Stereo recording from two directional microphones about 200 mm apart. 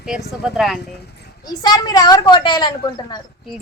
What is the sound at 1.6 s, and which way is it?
A child's voice, 20° left (ahead or behind).